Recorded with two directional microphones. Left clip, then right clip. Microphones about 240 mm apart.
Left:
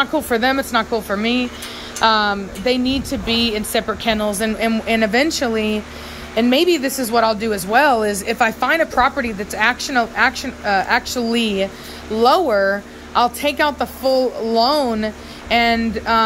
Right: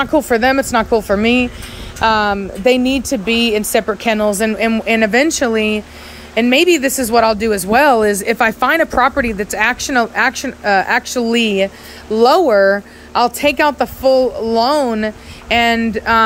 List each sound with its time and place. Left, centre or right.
0.0 s speech: centre